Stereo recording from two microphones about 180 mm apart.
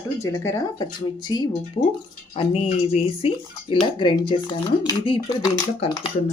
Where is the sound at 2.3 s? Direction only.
35° left (ahead or behind).